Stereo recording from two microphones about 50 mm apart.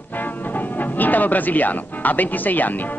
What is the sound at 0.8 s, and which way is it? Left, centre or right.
Speech, left.